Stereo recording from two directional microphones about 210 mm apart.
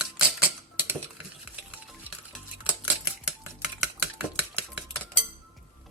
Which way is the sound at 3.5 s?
5° right (ahead or behind).